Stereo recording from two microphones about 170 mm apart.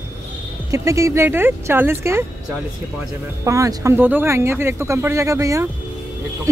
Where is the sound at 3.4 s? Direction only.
20° right (ahead or behind).